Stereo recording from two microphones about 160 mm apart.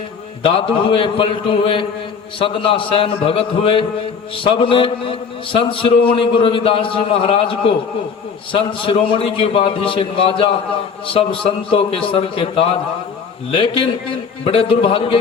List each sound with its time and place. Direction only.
0.4 s a man's voice: 35° left (ahead or behind)